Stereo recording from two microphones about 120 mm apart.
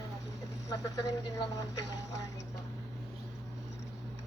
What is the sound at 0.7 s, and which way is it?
Speech, 30° left (ahead or behind).